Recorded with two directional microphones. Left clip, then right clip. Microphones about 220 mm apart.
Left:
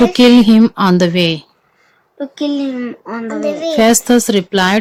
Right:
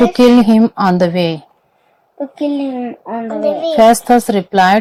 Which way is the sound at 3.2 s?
30° left (ahead or behind).